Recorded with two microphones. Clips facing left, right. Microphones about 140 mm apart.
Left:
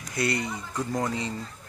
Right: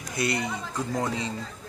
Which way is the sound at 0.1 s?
20° right (ahead or behind).